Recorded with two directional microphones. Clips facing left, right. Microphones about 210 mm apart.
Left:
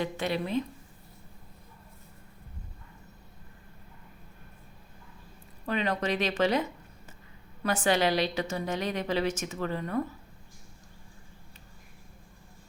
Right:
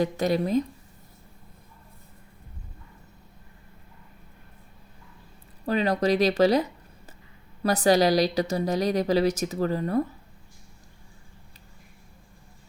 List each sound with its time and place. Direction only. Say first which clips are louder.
0.0 s a woman's voice: right 6 dB; 40° right (ahead or behind)
5.6 s a woman's voice: right 6 dB; 35° right (ahead or behind)